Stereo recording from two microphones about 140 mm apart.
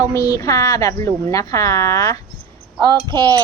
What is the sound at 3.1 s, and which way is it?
Cutlery, 30° right (ahead or behind).